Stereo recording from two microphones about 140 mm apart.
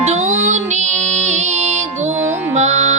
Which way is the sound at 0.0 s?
55° right (ahead or behind).